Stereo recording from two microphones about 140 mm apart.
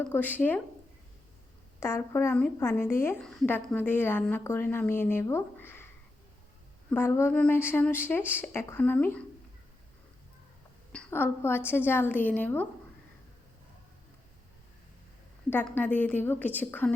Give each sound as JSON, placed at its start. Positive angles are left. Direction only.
{"t": 0.1, "sound": "a woman's voice", "side_deg": 10}
{"t": 1.8, "sound": "a woman's voice", "side_deg": 15}
{"t": 6.9, "sound": "a woman's voice", "side_deg": 15}
{"t": 11.1, "sound": "a woman's voice", "side_deg": 15}
{"t": 15.4, "sound": "a woman's voice", "side_deg": 15}